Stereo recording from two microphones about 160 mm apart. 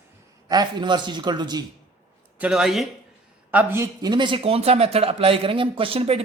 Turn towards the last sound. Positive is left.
turn(degrees=-35)  # may be behind; listen again after turning